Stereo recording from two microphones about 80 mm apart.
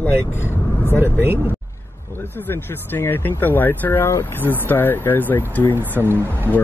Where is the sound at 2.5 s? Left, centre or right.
Left.